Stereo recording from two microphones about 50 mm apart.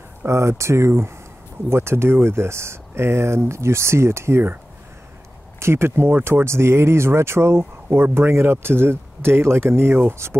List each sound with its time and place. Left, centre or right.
0.3 s speech: right
5.6 s speech: right
6.4 s speech: right